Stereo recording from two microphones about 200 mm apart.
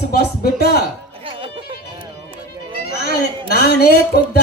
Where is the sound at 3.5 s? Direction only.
50° left (ahead or behind).